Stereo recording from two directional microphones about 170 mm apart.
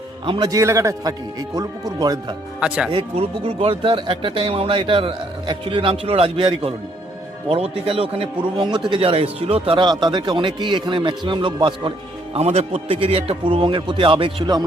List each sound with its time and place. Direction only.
0.3 s speech: 25° right (ahead or behind)
2.6 s speech: 5° right (ahead or behind)
2.9 s speech: 35° right (ahead or behind)